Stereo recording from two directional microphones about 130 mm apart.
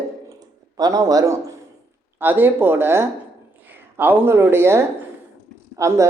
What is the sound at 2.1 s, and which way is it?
Speech, 15° right (ahead or behind).